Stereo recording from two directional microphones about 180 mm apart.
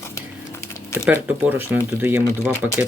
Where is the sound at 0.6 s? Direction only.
15° left (ahead or behind).